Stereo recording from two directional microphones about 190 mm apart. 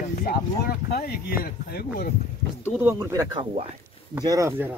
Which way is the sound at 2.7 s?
10° right (ahead or behind).